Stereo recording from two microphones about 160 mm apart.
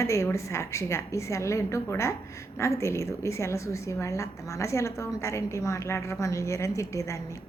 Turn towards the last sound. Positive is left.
turn(degrees=20)  # may be behind; listen again after turning